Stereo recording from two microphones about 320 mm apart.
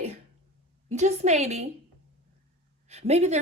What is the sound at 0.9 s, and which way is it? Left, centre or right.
Speech, right.